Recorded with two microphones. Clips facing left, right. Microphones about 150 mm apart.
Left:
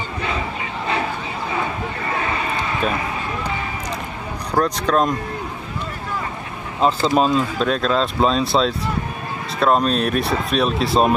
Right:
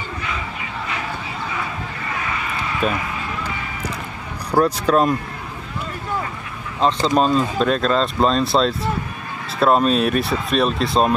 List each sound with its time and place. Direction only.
2.0 s vehicle: 30° left (ahead or behind)
2.8 s speech: centre (ahead or behind)
4.6 s speech: 5° right (ahead or behind)
6.8 s speech: 5° left (ahead or behind)